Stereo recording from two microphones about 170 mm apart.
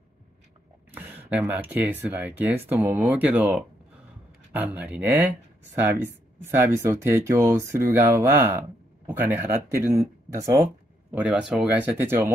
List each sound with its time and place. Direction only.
0.9 s speech: 10° right (ahead or behind)
6.4 s speech: 15° right (ahead or behind)
9.9 s a sound: 20° right (ahead or behind)
11.1 s speech: 5° right (ahead or behind)